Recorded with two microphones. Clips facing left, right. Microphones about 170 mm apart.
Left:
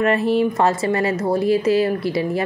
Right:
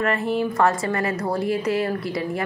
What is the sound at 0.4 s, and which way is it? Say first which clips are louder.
A woman's voice: left 3 dB; 25° left (ahead or behind).